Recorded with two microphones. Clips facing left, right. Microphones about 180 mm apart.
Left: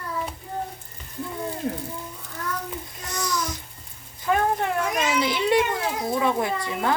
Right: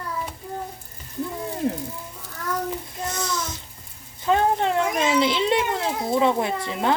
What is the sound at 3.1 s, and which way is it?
Music, 25° right (ahead or behind).